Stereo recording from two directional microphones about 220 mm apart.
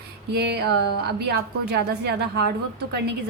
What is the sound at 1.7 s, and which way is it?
Speech, 50° right (ahead or behind).